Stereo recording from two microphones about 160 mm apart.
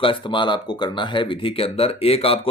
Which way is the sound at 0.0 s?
30° left (ahead or behind).